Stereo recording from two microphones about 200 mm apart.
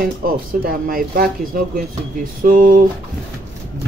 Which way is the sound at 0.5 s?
45° right (ahead or behind).